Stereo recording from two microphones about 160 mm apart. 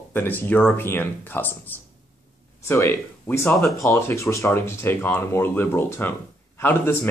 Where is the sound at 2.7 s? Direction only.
15° left (ahead or behind).